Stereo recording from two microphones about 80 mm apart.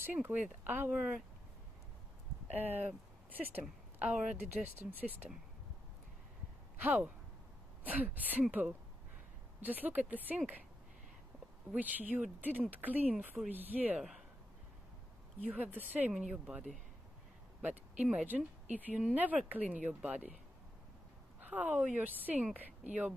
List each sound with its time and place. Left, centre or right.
0.0 s speech: right
2.5 s speech: right
6.8 s speech: centre
11.7 s speech: centre
15.4 s speech: right
16.1 s speech: centre
17.6 s a sound: centre
18.2 s speech: right
21.4 s speech: centre